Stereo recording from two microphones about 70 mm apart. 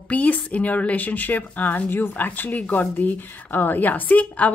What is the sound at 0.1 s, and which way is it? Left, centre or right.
A woman's voice, left.